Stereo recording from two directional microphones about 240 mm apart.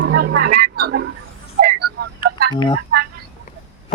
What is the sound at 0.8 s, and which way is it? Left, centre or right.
Speech, right.